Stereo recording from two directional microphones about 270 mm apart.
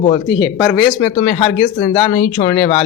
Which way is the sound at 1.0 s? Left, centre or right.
Centre.